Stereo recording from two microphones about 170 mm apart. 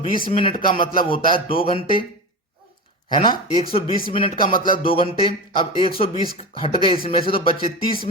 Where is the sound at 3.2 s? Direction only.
30° left (ahead or behind).